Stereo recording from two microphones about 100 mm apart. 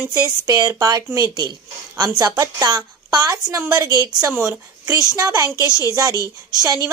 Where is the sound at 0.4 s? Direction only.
40° right (ahead or behind).